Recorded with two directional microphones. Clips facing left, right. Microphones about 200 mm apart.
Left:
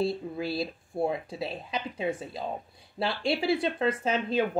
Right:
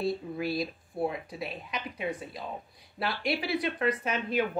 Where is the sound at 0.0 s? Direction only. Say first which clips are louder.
Left 2 dB; 25° left (ahead or behind).